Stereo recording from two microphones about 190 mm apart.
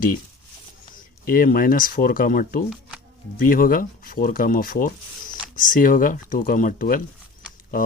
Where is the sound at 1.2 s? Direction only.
50° left (ahead or behind).